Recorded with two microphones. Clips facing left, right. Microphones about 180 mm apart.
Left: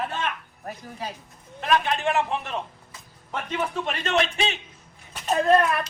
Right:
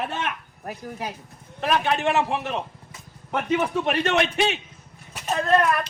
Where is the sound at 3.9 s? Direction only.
70° right (ahead or behind).